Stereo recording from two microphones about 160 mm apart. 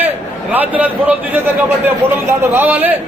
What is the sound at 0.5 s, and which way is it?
Speech, 10° right (ahead or behind).